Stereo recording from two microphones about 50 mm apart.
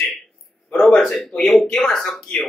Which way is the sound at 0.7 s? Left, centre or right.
Centre.